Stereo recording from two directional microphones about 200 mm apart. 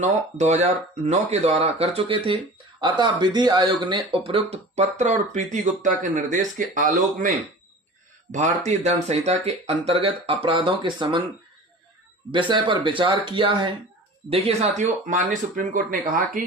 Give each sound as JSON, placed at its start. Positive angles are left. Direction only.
{"t": 0.0, "sound": "speech", "side_deg": -35}
{"t": 12.3, "sound": "speech", "side_deg": -25}